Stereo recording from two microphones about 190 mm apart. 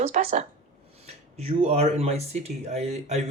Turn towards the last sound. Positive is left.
turn(degrees=-35)  # may be behind; listen again after turning